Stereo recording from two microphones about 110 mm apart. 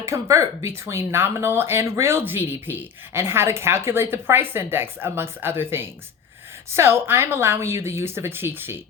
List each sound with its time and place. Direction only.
0.0 s speech: 30° right (ahead or behind)